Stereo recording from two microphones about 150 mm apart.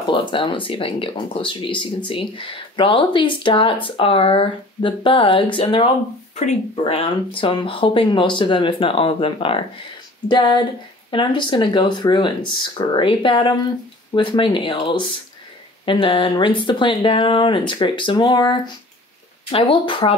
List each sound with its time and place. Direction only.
0.0 s speech: 30° left (ahead or behind)